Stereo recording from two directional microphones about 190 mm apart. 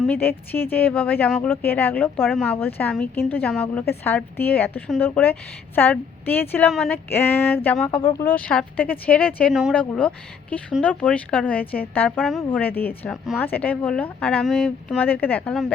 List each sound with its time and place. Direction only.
0.1 s speech: 10° left (ahead or behind)
7.9 s speech: 25° left (ahead or behind)
8.2 s speech: 10° left (ahead or behind)